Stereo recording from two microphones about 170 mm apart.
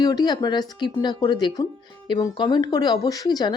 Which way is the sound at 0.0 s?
25° left (ahead or behind).